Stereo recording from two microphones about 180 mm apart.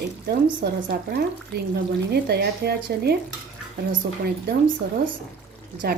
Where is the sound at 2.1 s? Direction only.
65° right (ahead or behind).